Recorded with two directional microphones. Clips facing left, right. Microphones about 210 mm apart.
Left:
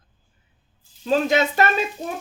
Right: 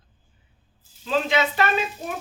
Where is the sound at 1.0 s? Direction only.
45° left (ahead or behind).